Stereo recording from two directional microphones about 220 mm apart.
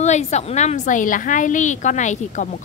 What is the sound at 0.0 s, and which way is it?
A woman's voice, 30° left (ahead or behind).